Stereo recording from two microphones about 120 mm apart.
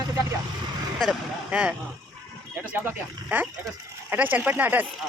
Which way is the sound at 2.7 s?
15° right (ahead or behind).